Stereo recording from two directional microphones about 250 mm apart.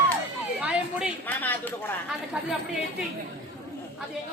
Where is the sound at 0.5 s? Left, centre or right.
Centre.